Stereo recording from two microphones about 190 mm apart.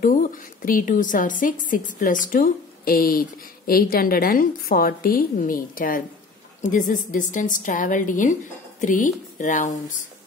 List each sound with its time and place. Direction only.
0.0 s a woman's voice: 45° left (ahead or behind)